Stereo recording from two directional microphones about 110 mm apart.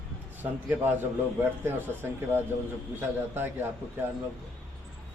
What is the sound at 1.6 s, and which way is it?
A man's voice, 20° right (ahead or behind).